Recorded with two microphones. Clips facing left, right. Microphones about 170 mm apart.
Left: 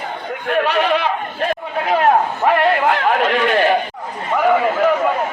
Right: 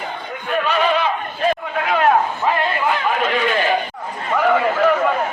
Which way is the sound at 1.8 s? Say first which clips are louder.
Left 2 dB; 35° left (ahead or behind).